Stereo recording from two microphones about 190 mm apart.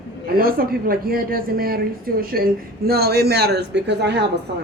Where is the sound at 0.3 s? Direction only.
50° right (ahead or behind).